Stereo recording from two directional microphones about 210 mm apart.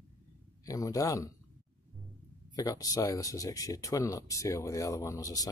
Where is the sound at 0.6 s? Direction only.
15° left (ahead or behind).